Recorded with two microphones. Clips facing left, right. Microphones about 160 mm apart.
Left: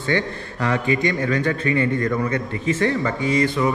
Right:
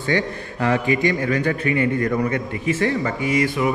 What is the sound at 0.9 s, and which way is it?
A man's voice, 30° left (ahead or behind).